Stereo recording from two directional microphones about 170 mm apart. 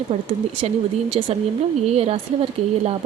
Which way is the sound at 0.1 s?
40° right (ahead or behind).